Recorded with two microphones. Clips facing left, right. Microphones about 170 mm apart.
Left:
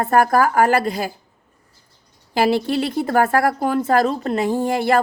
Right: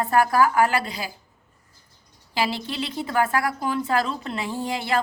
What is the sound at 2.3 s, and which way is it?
A woman's voice, 50° left (ahead or behind).